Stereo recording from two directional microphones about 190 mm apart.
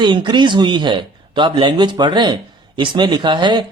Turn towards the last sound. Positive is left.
turn(degrees=-25)  # may be behind; listen again after turning